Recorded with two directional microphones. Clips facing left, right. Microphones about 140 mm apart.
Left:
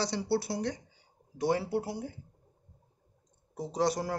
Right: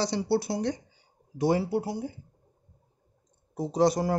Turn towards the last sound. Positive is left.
turn(degrees=-15)  # may be behind; listen again after turning